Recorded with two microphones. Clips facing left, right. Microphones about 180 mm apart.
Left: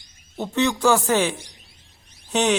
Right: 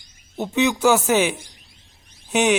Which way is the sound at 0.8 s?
5° right (ahead or behind).